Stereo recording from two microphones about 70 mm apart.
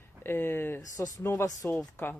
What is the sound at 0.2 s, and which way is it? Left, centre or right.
Speech, left.